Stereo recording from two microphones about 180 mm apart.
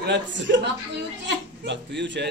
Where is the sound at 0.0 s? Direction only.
80° right.